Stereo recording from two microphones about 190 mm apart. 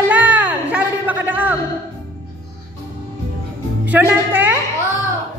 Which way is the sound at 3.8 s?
10° right (ahead or behind).